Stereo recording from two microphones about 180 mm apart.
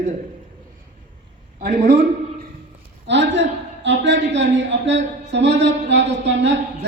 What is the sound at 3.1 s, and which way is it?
Speech, 75° right (ahead or behind).